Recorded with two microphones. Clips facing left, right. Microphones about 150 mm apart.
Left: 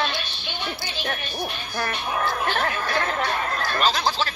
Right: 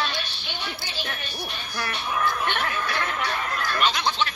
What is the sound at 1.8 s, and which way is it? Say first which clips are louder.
Speech: left 1 dB; 50° left (ahead or behind).